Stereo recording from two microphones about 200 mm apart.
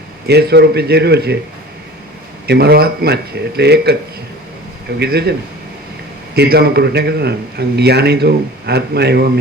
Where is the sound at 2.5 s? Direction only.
50° right (ahead or behind).